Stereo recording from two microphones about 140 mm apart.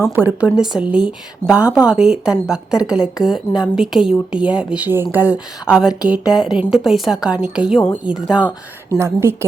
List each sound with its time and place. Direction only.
0.2 s a woman's voice: 10° right (ahead or behind)
9.0 s a woman's voice: 20° right (ahead or behind)